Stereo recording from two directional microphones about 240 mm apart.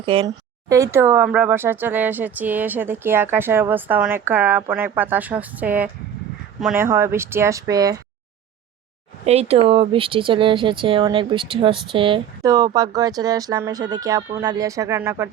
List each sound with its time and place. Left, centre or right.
0.0 s speech: right
0.7 s speech: centre
9.2 s speech: right; by 15.3 s centre